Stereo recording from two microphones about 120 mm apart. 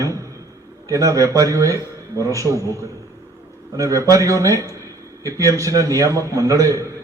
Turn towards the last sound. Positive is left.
turn(degrees=-30)  # may be behind; listen again after turning